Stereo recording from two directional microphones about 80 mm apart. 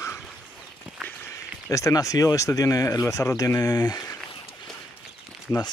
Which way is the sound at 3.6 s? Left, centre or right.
Left.